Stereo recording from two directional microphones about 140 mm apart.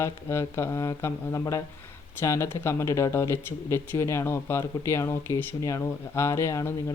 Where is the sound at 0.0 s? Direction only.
20° left (ahead or behind).